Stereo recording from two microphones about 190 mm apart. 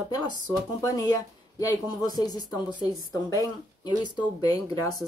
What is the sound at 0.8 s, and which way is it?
Speech, 15° left (ahead or behind).